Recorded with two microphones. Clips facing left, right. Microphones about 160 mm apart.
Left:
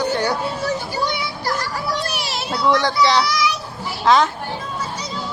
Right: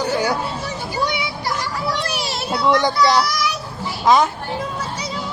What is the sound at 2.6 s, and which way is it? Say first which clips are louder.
Speech: right 1 dB; 20° right (ahead or behind).